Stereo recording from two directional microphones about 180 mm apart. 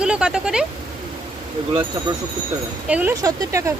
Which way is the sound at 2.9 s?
10° right (ahead or behind).